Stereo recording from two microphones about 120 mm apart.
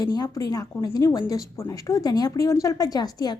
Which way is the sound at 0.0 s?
30° left (ahead or behind).